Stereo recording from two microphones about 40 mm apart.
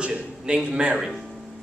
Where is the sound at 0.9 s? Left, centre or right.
Centre.